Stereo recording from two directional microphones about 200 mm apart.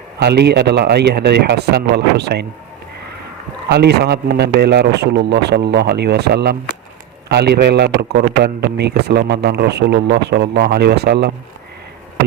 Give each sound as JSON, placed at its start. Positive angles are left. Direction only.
{"t": 0.2, "sound": "a man's voice", "side_deg": -55}
{"t": 3.7, "sound": "a man's voice", "side_deg": -55}